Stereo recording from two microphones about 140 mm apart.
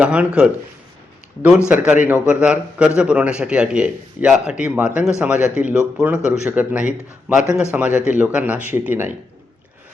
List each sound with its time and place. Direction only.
0.0 s a man's voice: 10° right (ahead or behind)